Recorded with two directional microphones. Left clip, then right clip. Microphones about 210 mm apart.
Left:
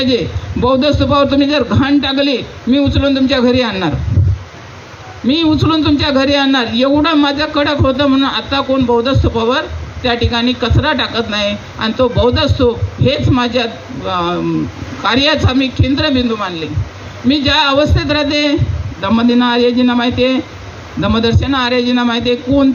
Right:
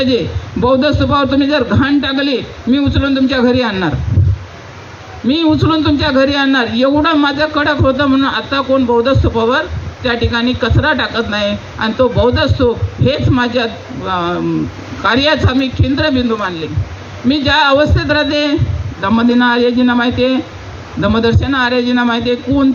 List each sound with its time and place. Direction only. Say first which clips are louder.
0.0 s a man's voice: even; 50° left (ahead or behind)
5.3 s a man's voice: even; 50° left (ahead or behind)